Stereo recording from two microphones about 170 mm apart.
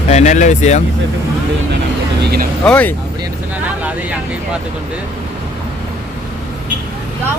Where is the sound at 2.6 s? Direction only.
10° left (ahead or behind).